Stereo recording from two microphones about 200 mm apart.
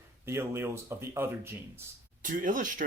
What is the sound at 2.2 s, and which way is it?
Speech, 40° right (ahead or behind).